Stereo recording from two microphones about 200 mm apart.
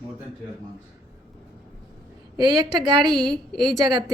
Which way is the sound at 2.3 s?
20° right (ahead or behind).